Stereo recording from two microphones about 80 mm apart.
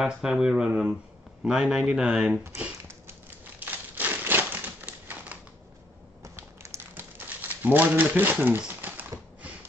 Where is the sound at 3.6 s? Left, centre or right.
Right.